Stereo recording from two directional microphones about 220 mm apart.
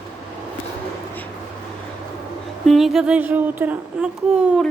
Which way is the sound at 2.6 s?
Centre (ahead or behind).